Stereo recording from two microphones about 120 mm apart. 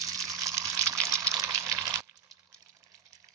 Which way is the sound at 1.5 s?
30° right (ahead or behind).